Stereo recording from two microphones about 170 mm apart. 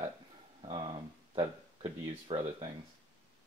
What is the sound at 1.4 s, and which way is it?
Speech, 35° right (ahead or behind).